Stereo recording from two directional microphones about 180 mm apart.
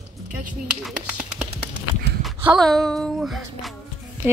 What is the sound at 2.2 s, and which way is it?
Music, centre (ahead or behind).